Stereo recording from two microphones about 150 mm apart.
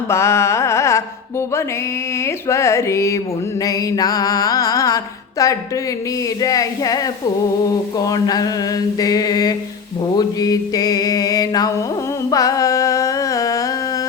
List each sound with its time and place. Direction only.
0.1 s music: 20° left (ahead or behind)
2.2 s mantra: 20° left (ahead or behind)
12.3 s music: 20° left (ahead or behind)